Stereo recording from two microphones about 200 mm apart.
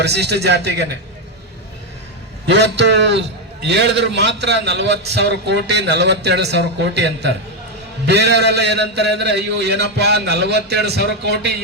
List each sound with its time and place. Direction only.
0.0 s a man's voice: 55° right (ahead or behind)
2.5 s a man's voice: 60° right (ahead or behind)